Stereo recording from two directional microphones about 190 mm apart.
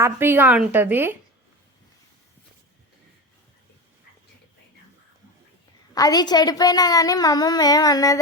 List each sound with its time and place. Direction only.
0.0 s a woman's voice: 10° right (ahead or behind)
5.9 s a woman's voice: 20° left (ahead or behind)